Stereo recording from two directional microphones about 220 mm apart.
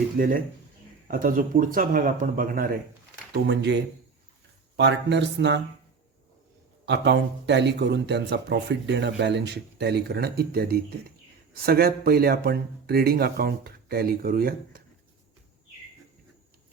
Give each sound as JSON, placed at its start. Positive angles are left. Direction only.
{"t": 0.2, "sound": "speech", "side_deg": -40}
{"t": 3.4, "sound": "speech", "side_deg": -50}
{"t": 6.8, "sound": "speech", "side_deg": -50}